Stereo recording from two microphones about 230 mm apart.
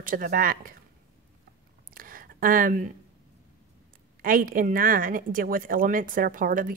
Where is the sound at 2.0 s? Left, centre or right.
Right.